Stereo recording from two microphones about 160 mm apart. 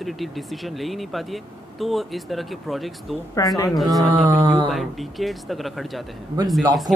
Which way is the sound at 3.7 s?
Centre (ahead or behind).